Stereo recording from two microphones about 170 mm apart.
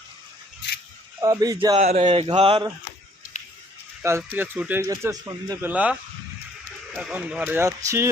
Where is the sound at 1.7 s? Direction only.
40° right (ahead or behind).